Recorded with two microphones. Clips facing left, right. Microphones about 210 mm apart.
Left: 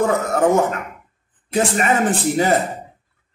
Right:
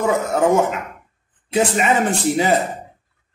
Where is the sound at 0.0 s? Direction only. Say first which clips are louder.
Even; centre (ahead or behind).